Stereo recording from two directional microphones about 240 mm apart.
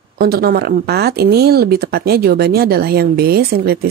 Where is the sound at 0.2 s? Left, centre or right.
Right.